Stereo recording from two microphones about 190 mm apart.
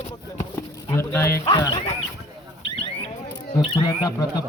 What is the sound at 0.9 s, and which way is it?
Speech, 15° left (ahead or behind).